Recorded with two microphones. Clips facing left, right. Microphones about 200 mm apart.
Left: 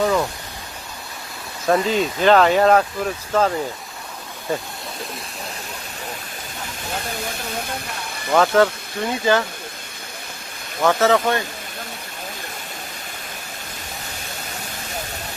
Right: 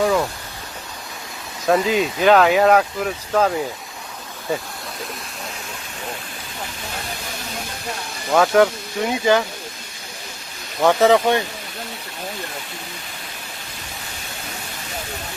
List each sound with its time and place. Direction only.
0.0 s pink noise: 5° right (ahead or behind)
1.6 s speech: 5° right (ahead or behind)
8.3 s speech: 10° right (ahead or behind)
10.8 s speech: 15° right (ahead or behind)